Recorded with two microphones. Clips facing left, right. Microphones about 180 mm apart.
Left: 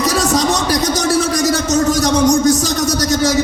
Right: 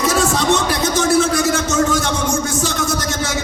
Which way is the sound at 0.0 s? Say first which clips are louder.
Left 2 dB; 40° left (ahead or behind).